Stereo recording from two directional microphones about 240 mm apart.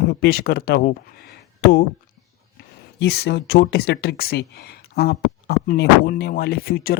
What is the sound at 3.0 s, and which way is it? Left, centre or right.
Speech, left.